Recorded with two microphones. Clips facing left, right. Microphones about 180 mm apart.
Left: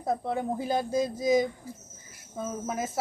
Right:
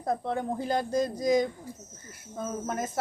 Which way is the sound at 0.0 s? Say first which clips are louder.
Left 1 dB; 5° left (ahead or behind).